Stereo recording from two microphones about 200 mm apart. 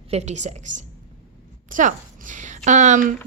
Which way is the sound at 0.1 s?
35° right (ahead or behind).